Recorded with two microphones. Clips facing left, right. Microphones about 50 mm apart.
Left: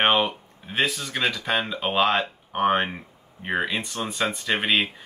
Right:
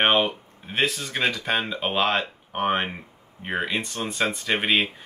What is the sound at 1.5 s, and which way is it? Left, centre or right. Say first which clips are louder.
Speech: even; centre.